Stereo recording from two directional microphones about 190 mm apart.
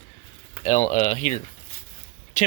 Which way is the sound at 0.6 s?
35° left (ahead or behind).